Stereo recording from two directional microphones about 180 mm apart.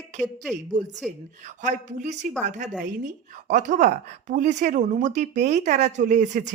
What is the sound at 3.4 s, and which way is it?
A woman's voice, 45° right (ahead or behind).